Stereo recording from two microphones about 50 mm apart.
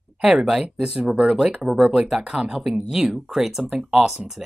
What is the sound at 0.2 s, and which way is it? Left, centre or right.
Speech, centre.